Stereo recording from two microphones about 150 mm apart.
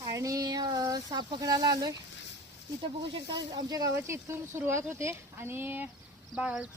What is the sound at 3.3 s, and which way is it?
Speech, 25° right (ahead or behind).